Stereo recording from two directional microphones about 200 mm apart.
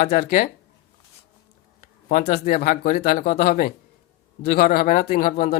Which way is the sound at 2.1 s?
45° left (ahead or behind).